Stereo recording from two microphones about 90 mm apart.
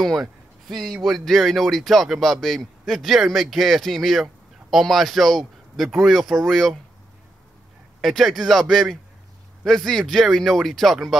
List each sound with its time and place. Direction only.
0.0 s speech: centre (ahead or behind)
8.0 s speech: centre (ahead or behind)